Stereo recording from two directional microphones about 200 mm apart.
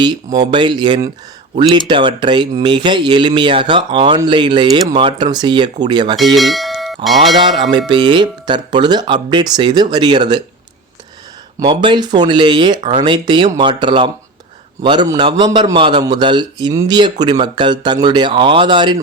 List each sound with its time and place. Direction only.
0.0 s speech: 20° right (ahead or behind)
6.1 s bell: centre (ahead or behind)
7.7 s speech: 25° right (ahead or behind)
11.6 s speech: 25° right (ahead or behind)